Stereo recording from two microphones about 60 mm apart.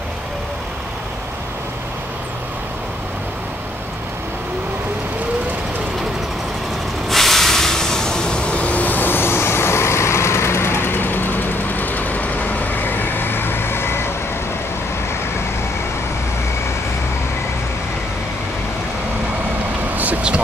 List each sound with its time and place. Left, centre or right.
7.1 s train: centre; by 14.1 s left
20.0 s vehicle: right